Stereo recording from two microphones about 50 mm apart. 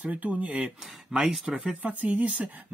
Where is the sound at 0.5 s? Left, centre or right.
Centre.